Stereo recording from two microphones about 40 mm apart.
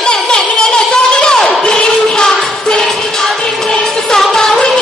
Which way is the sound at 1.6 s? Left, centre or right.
Left.